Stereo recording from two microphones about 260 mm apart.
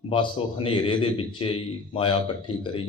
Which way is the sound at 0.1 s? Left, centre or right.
Centre.